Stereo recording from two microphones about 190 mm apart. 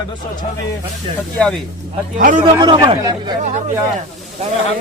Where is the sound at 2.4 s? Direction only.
25° right (ahead or behind).